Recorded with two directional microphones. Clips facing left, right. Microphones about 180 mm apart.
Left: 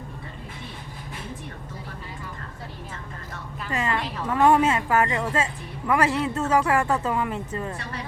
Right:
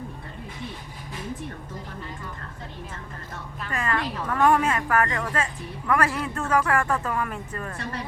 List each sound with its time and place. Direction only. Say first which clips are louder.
3.7 s a woman's voice: left 1 dB; 25° left (ahead or behind)